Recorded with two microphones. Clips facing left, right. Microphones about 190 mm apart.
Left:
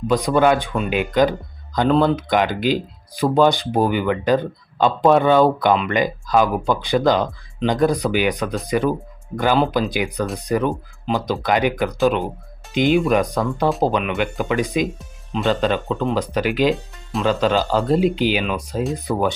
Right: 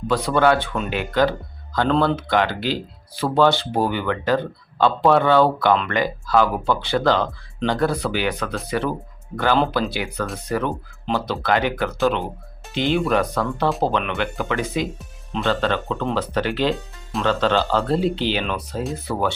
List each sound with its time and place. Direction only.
0.1 s speech: 15° left (ahead or behind)
14.9 s speech: centre (ahead or behind)
15.4 s speech: 15° left (ahead or behind)